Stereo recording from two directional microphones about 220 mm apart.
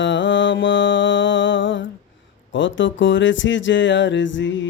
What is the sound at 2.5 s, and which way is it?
Speech, 60° left (ahead or behind).